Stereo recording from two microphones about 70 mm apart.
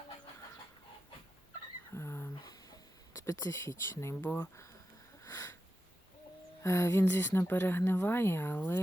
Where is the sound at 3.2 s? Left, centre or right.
Left.